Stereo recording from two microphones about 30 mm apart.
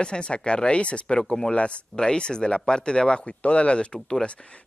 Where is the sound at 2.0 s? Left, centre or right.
Left.